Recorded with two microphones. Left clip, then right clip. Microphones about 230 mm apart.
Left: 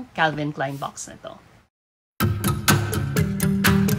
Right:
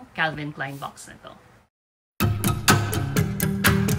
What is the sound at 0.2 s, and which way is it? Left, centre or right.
Speech, centre.